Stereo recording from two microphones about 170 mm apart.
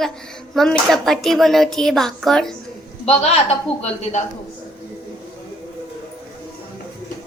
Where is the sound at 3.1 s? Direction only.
40° left (ahead or behind).